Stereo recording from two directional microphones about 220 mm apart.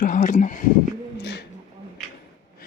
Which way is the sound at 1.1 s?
50° left (ahead or behind).